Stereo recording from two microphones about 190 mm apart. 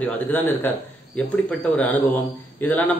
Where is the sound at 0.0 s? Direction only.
10° left (ahead or behind).